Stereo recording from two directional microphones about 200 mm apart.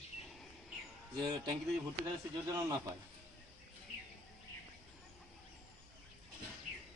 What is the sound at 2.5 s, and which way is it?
Speech, 15° right (ahead or behind).